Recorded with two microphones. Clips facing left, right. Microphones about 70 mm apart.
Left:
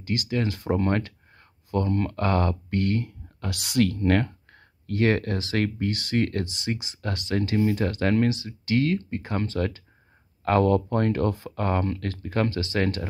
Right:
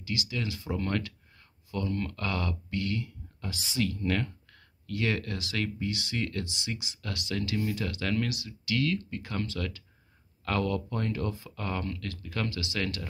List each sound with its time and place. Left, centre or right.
0.0 s speech: left
0.7 s speech: left